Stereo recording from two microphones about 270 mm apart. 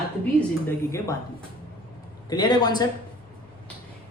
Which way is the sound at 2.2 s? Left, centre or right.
Centre.